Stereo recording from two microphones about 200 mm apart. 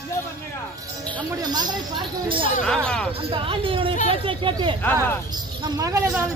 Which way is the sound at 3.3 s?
25° right (ahead or behind).